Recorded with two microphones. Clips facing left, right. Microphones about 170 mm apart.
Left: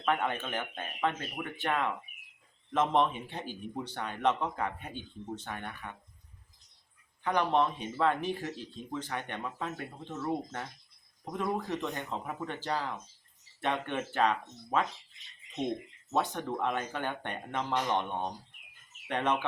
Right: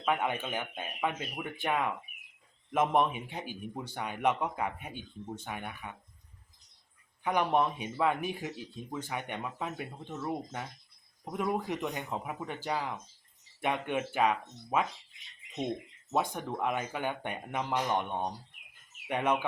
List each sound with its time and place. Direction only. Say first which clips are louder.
0.0 s speech: even; 10° right (ahead or behind)
7.3 s speech: even; 10° right (ahead or behind)
16.1 s speech: even; 10° right (ahead or behind)